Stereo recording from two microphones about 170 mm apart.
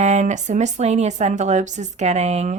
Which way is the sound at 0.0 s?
45° right (ahead or behind).